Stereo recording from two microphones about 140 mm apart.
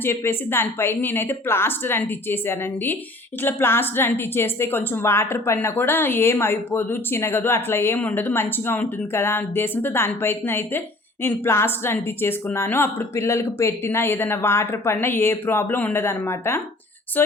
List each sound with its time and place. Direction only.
0.0 s a woman's voice: 15° left (ahead or behind)